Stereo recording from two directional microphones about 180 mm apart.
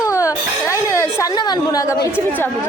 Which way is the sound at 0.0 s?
20° left (ahead or behind).